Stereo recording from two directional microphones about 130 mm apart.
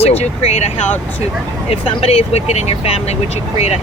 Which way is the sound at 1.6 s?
50° left (ahead or behind).